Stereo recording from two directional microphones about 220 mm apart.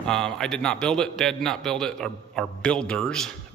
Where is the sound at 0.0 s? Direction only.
5° left (ahead or behind).